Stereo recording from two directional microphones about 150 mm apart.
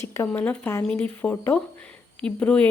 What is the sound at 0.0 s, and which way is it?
Speech, 10° left (ahead or behind).